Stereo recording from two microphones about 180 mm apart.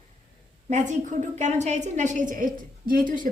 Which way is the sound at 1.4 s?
40° right (ahead or behind).